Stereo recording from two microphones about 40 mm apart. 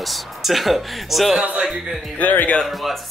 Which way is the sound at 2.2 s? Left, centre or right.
Left.